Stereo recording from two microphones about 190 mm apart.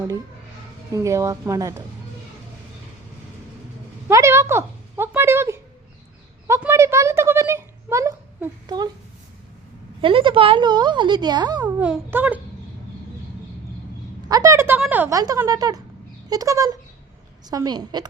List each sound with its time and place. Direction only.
0.9 s speech: 15° right (ahead or behind)
4.1 s speech: 15° right (ahead or behind)
6.5 s a sound: 15° right (ahead or behind)
10.0 s speech: 25° right (ahead or behind)
11.8 s speech: 10° right (ahead or behind)
14.3 s speech: 20° right (ahead or behind)